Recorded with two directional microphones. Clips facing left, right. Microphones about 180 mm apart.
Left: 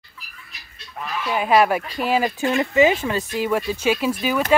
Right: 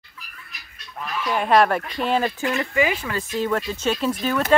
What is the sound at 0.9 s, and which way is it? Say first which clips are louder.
Speech: even; 5° left (ahead or behind).